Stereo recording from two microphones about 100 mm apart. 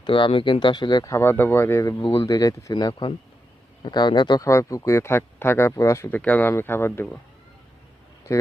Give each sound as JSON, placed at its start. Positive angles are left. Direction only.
{"t": 0.0, "sound": "speech", "side_deg": 60}
{"t": 1.1, "sound": "speech", "side_deg": 20}
{"t": 2.0, "sound": "speech", "side_deg": 60}
{"t": 2.2, "sound": "speech", "side_deg": 35}
{"t": 4.4, "sound": "speech", "side_deg": 30}
{"t": 6.1, "sound": "speech", "side_deg": 15}
{"t": 8.3, "sound": "speech", "side_deg": 30}